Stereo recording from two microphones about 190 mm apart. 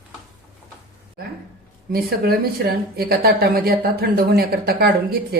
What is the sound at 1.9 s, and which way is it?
Speech, 55° right (ahead or behind).